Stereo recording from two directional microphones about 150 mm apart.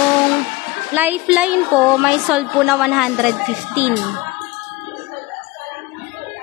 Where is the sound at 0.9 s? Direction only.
10° right (ahead or behind).